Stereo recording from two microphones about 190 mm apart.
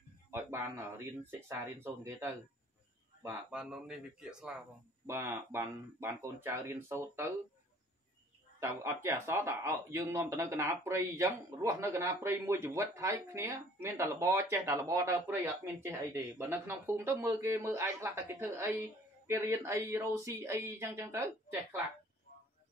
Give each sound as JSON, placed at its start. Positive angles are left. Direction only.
{"t": 0.3, "sound": "speech", "side_deg": -10}
{"t": 8.5, "sound": "speech", "side_deg": -15}